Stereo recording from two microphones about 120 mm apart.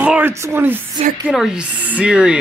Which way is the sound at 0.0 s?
10° right (ahead or behind).